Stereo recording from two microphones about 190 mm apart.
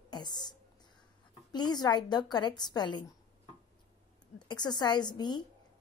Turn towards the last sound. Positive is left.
turn(degrees=25)  # may be behind; listen again after turning